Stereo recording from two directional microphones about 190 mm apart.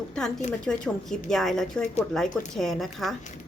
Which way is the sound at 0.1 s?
Centre (ahead or behind).